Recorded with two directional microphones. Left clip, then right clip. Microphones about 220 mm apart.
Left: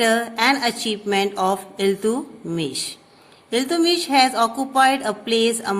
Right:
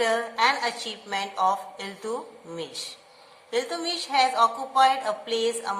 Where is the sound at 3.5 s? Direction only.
45° left (ahead or behind).